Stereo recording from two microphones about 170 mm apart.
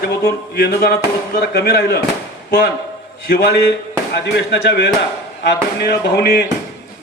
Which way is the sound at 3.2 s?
65° left (ahead or behind).